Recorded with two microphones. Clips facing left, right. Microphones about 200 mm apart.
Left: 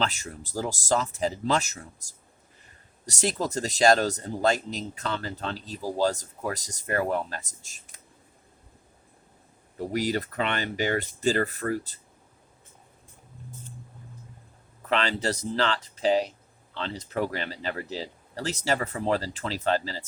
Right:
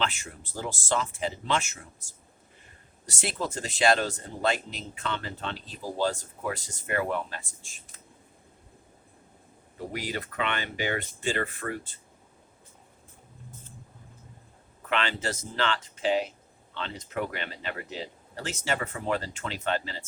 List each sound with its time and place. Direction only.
0.0 s speech: 40° left (ahead or behind)
9.7 s speech: 40° left (ahead or behind)
14.8 s speech: 35° left (ahead or behind)